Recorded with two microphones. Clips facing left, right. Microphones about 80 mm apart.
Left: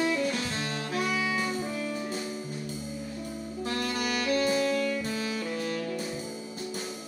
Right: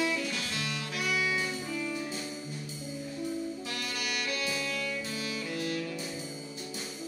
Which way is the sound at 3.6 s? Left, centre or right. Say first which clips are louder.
Left 6 dB; left.